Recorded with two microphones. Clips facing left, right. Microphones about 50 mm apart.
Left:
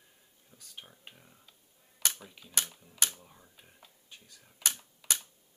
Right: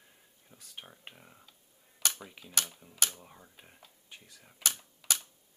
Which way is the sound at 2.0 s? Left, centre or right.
Centre.